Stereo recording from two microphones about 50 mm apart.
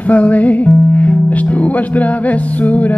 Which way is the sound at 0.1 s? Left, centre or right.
Left.